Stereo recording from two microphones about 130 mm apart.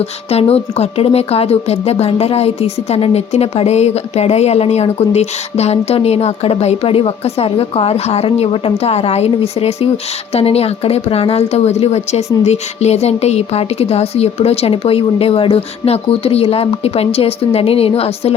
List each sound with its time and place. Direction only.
0.0 s a woman's voice: 50° left (ahead or behind)